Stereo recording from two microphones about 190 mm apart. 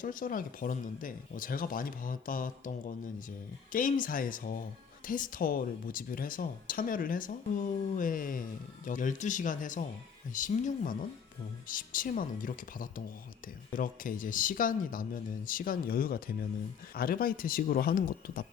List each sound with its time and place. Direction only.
0.0 s speech: 45° left (ahead or behind)